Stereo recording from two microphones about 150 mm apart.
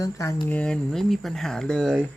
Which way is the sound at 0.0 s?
20° left (ahead or behind).